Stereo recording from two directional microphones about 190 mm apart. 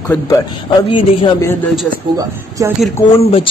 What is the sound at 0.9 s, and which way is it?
Speech, 25° left (ahead or behind).